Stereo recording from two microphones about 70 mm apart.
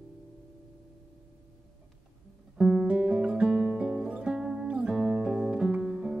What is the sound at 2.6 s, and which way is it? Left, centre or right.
Music, centre.